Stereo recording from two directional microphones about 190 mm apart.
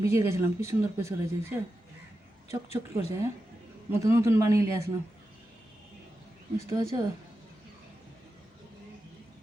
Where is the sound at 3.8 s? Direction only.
15° right (ahead or behind).